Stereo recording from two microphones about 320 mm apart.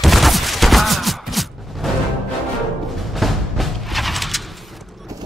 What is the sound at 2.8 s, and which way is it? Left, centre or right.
Music, centre.